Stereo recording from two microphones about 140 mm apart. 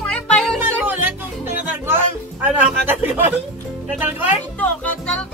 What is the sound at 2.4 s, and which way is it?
Music, 15° right (ahead or behind).